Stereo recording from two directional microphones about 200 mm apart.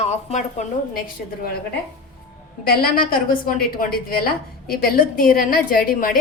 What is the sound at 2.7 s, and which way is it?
A woman's voice, 50° left (ahead or behind).